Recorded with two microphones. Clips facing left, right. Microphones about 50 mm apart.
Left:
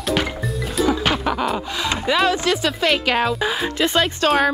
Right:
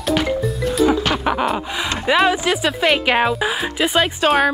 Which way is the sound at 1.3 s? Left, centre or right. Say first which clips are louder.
Right 2 dB; centre.